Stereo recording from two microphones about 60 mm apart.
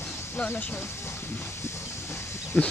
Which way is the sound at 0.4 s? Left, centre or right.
Left.